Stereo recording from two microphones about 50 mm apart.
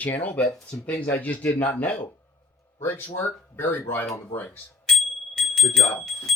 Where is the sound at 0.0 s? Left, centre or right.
Left.